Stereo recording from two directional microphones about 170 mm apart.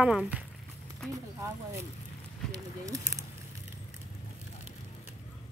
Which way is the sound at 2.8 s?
20° right (ahead or behind).